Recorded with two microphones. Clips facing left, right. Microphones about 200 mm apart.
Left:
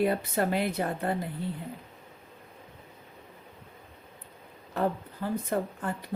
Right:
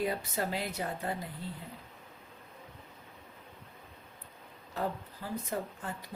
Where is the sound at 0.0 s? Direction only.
60° left (ahead or behind).